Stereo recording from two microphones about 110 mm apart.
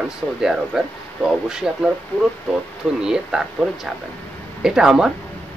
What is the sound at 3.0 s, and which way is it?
Speech, 5° right (ahead or behind).